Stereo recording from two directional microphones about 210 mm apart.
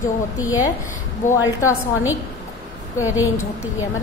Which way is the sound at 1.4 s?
15° left (ahead or behind).